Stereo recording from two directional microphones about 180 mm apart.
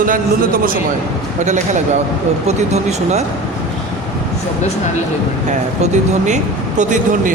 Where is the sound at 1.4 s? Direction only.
40° right (ahead or behind).